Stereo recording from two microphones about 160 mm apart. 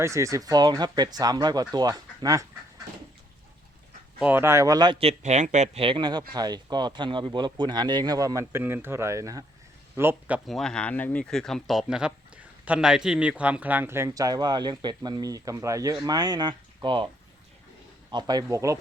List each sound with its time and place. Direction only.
0.0 s a man's voice: 20° right (ahead or behind)
4.2 s a man's voice: 10° right (ahead or behind)
10.5 s a man's voice: 5° left (ahead or behind); by 17.1 s 30° right (ahead or behind)
18.1 s a man's voice: 25° right (ahead or behind)